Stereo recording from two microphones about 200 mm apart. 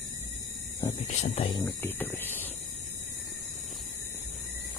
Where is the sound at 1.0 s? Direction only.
30° left (ahead or behind).